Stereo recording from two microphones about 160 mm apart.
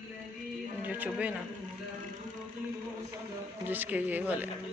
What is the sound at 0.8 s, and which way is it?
Speech, 10° right (ahead or behind).